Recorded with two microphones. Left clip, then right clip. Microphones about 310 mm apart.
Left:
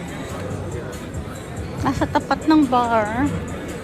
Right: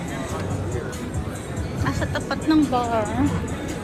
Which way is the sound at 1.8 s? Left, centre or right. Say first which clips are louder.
Left 7 dB; centre.